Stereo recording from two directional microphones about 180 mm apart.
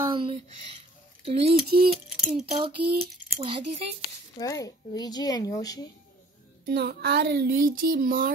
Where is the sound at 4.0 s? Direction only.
20° left (ahead or behind).